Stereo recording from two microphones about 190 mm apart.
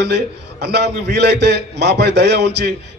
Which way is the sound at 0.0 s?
60° right (ahead or behind).